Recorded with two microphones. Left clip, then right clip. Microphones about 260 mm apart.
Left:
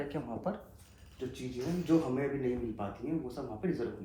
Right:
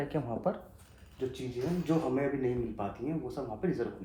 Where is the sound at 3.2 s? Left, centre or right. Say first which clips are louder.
Right 2 dB; right.